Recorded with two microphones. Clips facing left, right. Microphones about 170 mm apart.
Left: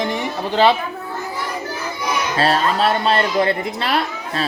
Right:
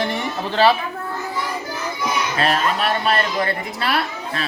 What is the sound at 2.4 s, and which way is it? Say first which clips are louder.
Speech: left 4 dB; 30° left (ahead or behind).